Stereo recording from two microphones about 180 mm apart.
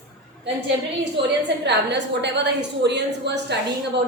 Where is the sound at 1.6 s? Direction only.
75° right (ahead or behind).